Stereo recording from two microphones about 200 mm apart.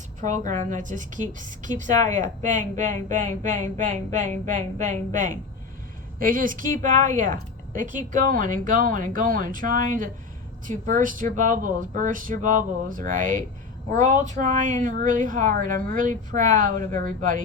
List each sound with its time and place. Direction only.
0.2 s a woman's voice: 40° right (ahead or behind)